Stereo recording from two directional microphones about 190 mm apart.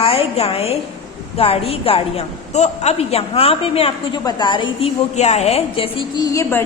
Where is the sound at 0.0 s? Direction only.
30° left (ahead or behind).